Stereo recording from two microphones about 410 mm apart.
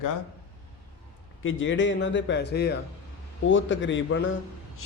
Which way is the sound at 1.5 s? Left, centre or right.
Left.